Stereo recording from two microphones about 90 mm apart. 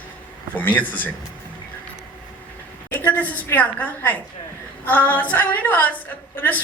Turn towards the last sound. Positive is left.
turn(degrees=20)  # may be behind; listen again after turning